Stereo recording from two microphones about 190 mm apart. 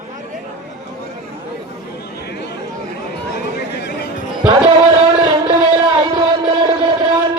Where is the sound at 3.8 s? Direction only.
60° left (ahead or behind).